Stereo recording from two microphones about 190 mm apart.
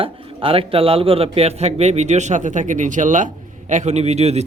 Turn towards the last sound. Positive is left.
turn(degrees=-35)  # may be behind; listen again after turning